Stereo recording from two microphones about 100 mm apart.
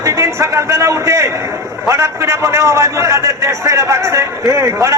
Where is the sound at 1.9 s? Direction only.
30° right (ahead or behind).